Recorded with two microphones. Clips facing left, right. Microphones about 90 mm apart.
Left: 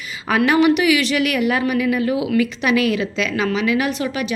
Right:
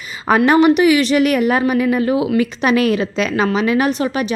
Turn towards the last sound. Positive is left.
turn(degrees=-40)  # may be behind; listen again after turning